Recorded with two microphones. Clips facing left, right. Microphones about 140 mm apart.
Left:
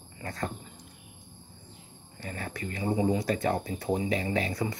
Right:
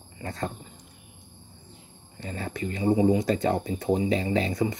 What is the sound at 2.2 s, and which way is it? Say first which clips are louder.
Speech: right 4 dB; 25° right (ahead or behind).